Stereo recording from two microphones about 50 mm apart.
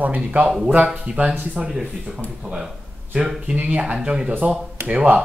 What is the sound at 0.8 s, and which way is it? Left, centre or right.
Speech, centre.